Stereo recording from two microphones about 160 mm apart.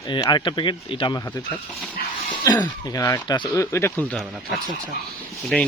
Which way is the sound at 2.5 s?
20° left (ahead or behind).